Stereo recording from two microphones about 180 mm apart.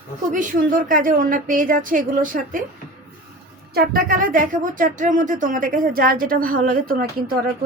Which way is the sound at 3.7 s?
55° right (ahead or behind).